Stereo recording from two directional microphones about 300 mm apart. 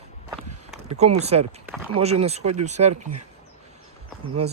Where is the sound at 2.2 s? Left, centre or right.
Right.